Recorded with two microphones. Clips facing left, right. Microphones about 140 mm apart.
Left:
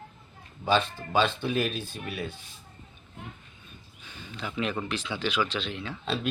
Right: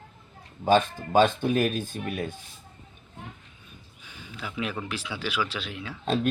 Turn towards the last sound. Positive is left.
turn(degrees=-10)  # may be behind; listen again after turning